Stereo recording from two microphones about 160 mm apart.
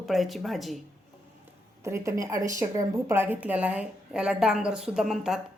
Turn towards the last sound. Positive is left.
turn(degrees=-5)  # may be behind; listen again after turning